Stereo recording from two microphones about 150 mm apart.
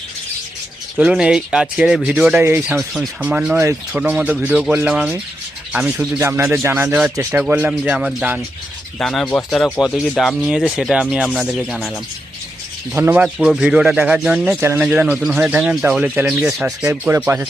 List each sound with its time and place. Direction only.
0.9 s speech: 5° right (ahead or behind)
2.7 s speech: centre (ahead or behind)
9.0 s speech: 5° left (ahead or behind)
12.9 s speech: 10° right (ahead or behind)
16.9 s speech: 15° right (ahead or behind)